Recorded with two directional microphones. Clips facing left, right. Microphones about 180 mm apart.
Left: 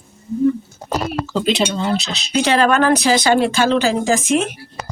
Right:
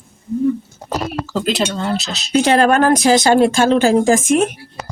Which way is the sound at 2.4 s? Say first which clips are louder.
Right 2 dB; 45° right (ahead or behind).